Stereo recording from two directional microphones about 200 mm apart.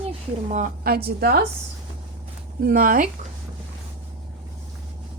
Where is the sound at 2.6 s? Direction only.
45° right (ahead or behind).